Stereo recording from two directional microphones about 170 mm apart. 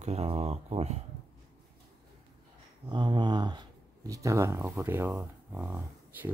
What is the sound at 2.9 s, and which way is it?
Speech, 25° right (ahead or behind).